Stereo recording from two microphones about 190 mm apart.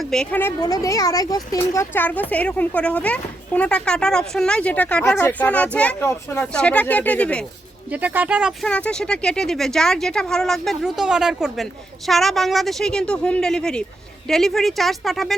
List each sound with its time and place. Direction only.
0.0 s speech: 5° left (ahead or behind)
7.9 s speech: 10° right (ahead or behind)
8.6 s speech: 5° left (ahead or behind)